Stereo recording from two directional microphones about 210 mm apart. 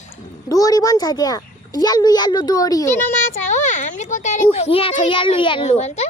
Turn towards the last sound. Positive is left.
turn(degrees=30)  # may be behind; listen again after turning